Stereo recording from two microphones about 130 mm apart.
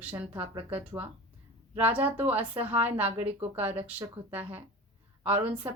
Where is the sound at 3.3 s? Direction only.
55° right (ahead or behind).